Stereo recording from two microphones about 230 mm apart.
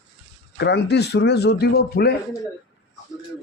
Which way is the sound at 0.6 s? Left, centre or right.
Left.